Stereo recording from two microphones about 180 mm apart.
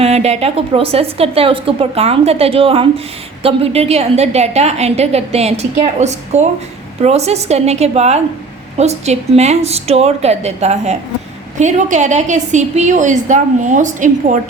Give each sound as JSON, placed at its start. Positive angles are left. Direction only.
{"t": 0.0, "sound": "a woman's voice", "side_deg": -35}